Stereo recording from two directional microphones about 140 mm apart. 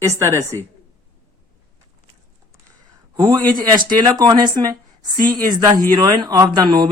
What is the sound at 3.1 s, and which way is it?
A man's voice, 30° right (ahead or behind).